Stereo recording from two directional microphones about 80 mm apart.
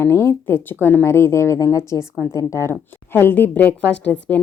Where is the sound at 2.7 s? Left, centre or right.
Left.